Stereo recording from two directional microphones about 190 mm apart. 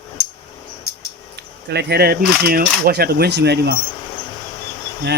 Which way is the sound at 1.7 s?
55° right (ahead or behind).